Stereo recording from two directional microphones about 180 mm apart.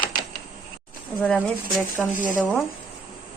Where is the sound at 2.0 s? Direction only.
Centre (ahead or behind).